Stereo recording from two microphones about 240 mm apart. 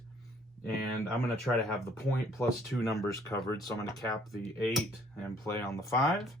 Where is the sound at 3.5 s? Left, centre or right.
Centre.